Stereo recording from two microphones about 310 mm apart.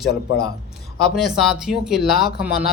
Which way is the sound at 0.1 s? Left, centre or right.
Left.